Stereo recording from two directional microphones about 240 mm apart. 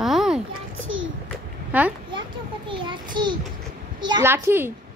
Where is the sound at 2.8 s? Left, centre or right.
Centre.